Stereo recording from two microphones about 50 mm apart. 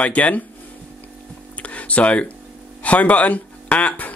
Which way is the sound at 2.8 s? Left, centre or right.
Left.